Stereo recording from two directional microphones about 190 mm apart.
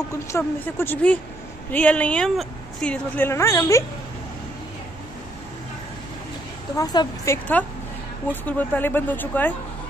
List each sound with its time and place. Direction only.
0.1 s speech: 15° left (ahead or behind)
6.8 s a woman's voice: 20° left (ahead or behind)
8.3 s speech: 10° left (ahead or behind)